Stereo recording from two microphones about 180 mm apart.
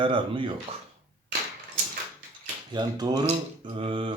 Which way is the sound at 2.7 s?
25° right (ahead or behind).